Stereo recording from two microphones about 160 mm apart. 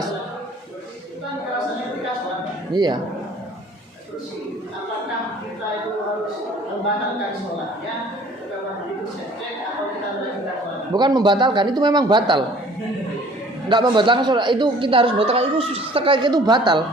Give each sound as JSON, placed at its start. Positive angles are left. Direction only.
{"t": 2.7, "sound": "a man's voice", "side_deg": -25}
{"t": 10.9, "sound": "a man's voice", "side_deg": -25}
{"t": 13.7, "sound": "a man's voice", "side_deg": -30}